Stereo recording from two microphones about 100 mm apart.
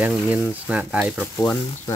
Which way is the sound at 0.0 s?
15° right (ahead or behind).